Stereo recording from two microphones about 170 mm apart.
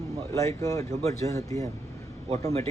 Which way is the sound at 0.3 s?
20° left (ahead or behind).